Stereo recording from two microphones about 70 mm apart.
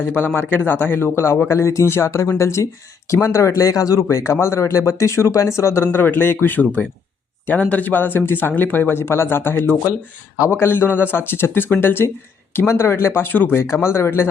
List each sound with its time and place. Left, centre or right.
0.6 s a man's voice: left